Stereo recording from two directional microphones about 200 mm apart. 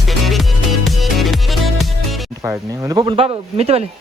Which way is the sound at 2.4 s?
10° right (ahead or behind).